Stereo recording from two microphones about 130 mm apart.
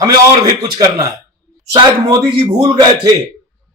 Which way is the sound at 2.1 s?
30° right (ahead or behind).